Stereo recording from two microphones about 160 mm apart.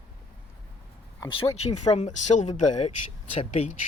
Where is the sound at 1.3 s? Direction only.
40° left (ahead or behind).